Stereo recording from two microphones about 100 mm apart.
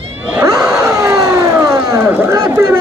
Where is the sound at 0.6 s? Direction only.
30° right (ahead or behind).